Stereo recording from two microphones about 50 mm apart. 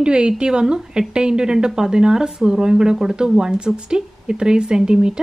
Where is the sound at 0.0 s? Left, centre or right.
Centre.